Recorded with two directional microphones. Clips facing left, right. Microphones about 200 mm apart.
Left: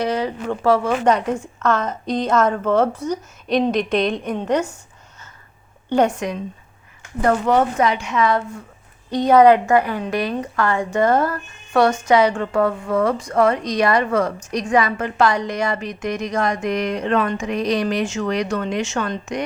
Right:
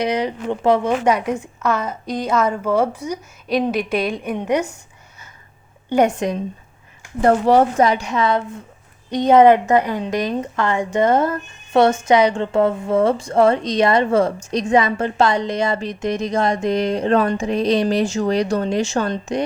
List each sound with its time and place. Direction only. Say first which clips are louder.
0.0 s a woman's voice: right 1 dB; 20° right (ahead or behind)
6.1 s a woman's voice: right 3 dB; 30° right (ahead or behind)